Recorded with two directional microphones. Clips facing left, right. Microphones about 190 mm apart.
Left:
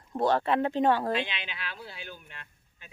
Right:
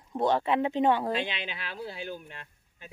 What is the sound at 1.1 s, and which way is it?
Speech, 40° right (ahead or behind).